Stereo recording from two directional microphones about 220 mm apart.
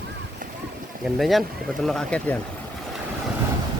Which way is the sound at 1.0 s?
Centre (ahead or behind).